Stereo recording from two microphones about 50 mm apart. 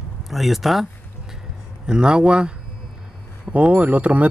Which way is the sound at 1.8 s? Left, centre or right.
Centre.